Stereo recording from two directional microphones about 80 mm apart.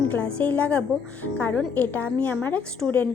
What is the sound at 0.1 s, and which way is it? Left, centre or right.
A woman's voice, centre.